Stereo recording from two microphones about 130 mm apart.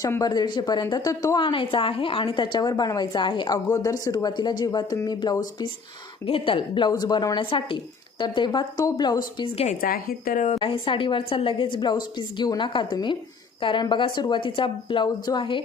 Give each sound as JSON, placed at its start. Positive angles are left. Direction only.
{"t": 0.0, "sound": "a woman's voice", "side_deg": 25}
{"t": 1.4, "sound": "a woman's voice", "side_deg": 40}
{"t": 6.2, "sound": "a woman's voice", "side_deg": 45}
{"t": 9.8, "sound": "speech", "side_deg": 85}
{"t": 10.5, "sound": "a woman's voice", "side_deg": 45}